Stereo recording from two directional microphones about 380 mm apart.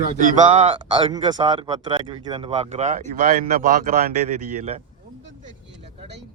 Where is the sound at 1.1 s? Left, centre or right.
Centre.